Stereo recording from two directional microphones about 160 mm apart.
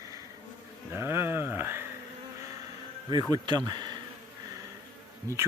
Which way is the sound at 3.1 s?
25° right (ahead or behind).